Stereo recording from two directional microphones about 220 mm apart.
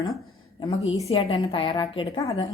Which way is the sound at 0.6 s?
30° left (ahead or behind).